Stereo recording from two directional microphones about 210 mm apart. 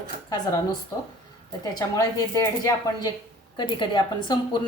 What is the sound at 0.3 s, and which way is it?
A woman's voice, 20° left (ahead or behind).